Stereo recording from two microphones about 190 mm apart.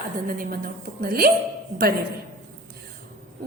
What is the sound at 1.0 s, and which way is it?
Speech, 55° right (ahead or behind).